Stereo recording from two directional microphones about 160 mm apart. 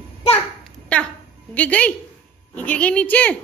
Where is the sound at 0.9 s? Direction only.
10° left (ahead or behind).